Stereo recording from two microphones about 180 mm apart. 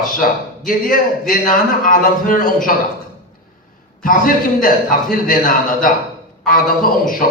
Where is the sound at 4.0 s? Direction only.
50° left (ahead or behind).